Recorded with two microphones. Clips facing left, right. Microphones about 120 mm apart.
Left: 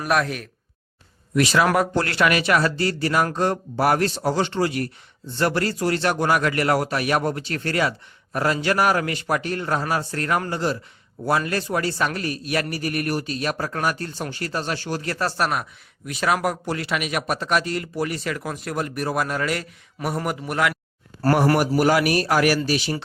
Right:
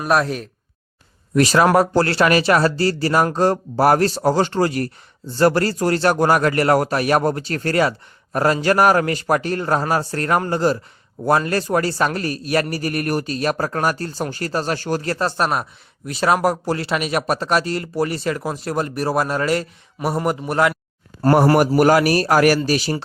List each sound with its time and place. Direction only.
0.0 s speech: 35° right (ahead or behind)
15.2 s speech: 25° right (ahead or behind)
21.6 s speech: 45° right (ahead or behind)